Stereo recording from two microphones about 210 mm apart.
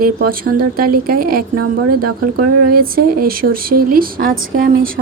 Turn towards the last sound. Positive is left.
turn(degrees=-45)  # may be behind; listen again after turning